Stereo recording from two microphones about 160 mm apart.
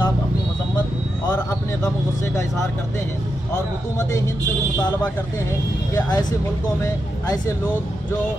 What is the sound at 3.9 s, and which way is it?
Speech, 20° left (ahead or behind).